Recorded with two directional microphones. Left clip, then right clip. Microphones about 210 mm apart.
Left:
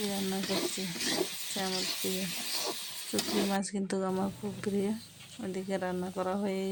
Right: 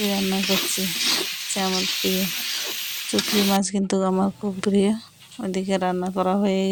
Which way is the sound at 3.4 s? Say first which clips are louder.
Right 11 dB; 30° right (ahead or behind).